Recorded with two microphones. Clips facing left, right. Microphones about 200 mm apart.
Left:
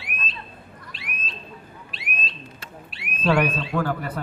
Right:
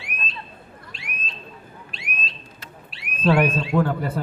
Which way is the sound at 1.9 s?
Centre (ahead or behind).